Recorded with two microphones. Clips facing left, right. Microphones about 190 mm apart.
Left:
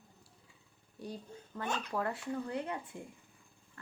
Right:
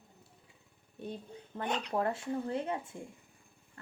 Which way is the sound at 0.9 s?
20° right (ahead or behind).